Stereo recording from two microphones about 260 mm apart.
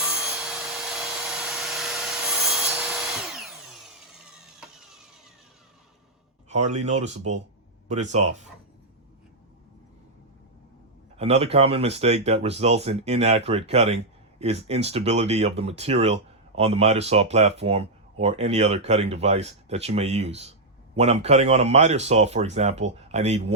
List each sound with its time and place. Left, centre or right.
0.0 s a sound: centre
6.5 s speech: right
11.2 s speech: right